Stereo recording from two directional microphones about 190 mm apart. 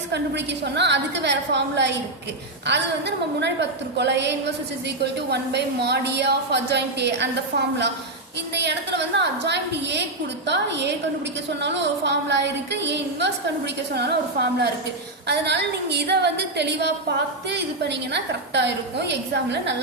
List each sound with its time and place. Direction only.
0.1 s a woman's voice: 65° right (ahead or behind)